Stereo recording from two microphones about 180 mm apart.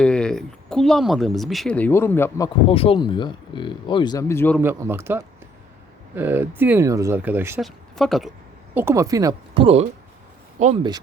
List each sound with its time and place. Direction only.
0.0 s speech: 5° left (ahead or behind)
2.6 s speech: 30° left (ahead or behind); by 4.5 s 15° left (ahead or behind)
4.6 s speech: 15° right (ahead or behind)
7.6 s speech: centre (ahead or behind)
8.7 s speech: 15° right (ahead or behind)
10.6 s speech: 45° right (ahead or behind)